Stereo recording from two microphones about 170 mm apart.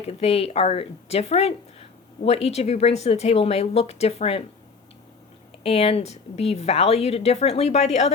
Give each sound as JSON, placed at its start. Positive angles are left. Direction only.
{"t": 0.1, "sound": "speech", "side_deg": 35}
{"t": 5.6, "sound": "speech", "side_deg": 35}